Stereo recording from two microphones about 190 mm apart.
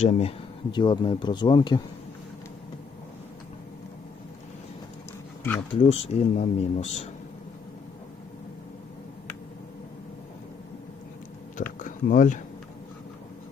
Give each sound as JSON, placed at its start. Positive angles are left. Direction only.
{"t": 0.0, "sound": "speech", "side_deg": 35}
{"t": 5.7, "sound": "speech", "side_deg": 30}
{"t": 11.5, "sound": "a sound", "side_deg": 45}